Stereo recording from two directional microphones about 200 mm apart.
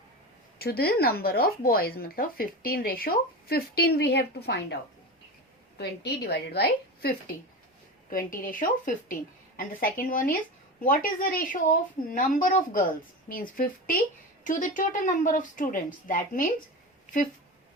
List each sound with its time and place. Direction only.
0.6 s speech: 50° left (ahead or behind)
5.7 s speech: 55° left (ahead or behind)
8.1 s a woman's voice: 45° left (ahead or behind)